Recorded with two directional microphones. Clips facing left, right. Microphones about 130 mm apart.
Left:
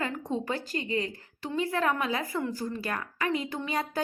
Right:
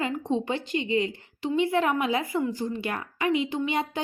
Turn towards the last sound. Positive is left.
turn(degrees=-20)  # may be behind; listen again after turning